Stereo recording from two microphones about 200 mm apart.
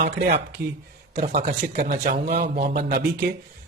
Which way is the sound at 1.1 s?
45° right (ahead or behind).